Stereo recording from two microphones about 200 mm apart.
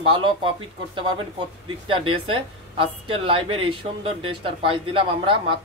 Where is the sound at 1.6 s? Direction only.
25° right (ahead or behind).